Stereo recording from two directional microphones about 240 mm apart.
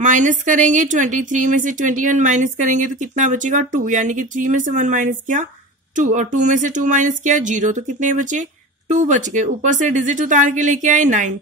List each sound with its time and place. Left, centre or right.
0.0 s speech: right